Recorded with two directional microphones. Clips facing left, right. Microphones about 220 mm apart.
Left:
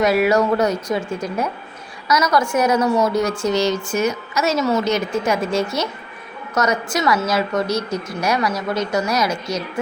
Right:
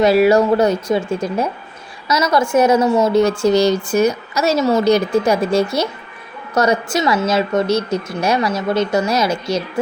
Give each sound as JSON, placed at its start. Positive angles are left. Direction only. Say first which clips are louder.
{"t": 0.0, "sound": "a woman's voice", "louder": "right 4 dB", "side_deg": -30}